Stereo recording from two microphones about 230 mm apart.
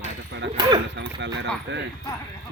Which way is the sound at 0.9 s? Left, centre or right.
Right.